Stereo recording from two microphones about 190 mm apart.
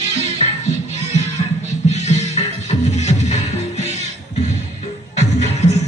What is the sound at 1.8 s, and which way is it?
Music, 35° left (ahead or behind).